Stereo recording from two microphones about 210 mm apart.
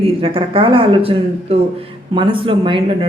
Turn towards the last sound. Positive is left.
turn(degrees=-25)  # may be behind; listen again after turning